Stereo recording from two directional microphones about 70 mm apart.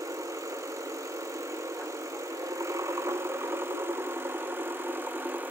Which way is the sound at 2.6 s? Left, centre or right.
Right.